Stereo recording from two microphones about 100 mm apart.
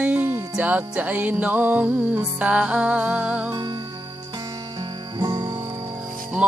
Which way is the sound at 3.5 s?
45° right (ahead or behind).